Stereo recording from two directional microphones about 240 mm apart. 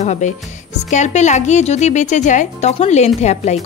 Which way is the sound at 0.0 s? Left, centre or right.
Left.